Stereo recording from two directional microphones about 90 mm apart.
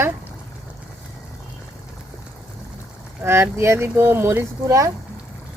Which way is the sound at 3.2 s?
25° right (ahead or behind).